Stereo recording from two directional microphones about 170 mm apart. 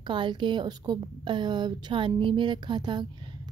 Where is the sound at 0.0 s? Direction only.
30° right (ahead or behind).